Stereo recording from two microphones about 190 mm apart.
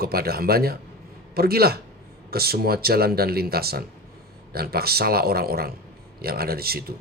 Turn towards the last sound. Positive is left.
turn(degrees=-55)  # may be behind; listen again after turning